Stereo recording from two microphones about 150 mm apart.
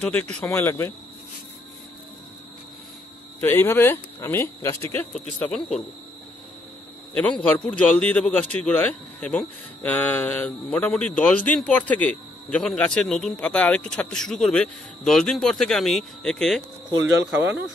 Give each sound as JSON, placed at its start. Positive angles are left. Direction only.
{"t": 0.0, "sound": "a man's voice", "side_deg": 10}
{"t": 3.3, "sound": "a man's voice", "side_deg": 15}
{"t": 7.2, "sound": "a man's voice", "side_deg": 10}
{"t": 17.3, "sound": "speech", "side_deg": -10}